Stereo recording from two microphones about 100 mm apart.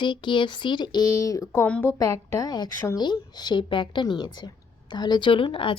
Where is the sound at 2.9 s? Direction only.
45° left (ahead or behind).